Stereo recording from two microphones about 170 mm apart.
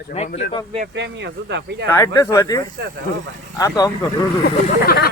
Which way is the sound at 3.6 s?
20° left (ahead or behind).